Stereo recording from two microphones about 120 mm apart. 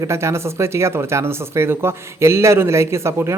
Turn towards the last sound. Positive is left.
turn(degrees=-20)  # may be behind; listen again after turning